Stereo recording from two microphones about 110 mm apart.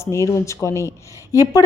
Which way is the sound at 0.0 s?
25° left (ahead or behind).